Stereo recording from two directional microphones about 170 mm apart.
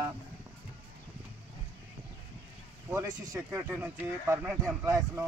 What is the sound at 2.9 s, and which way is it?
A man's voice, 15° right (ahead or behind).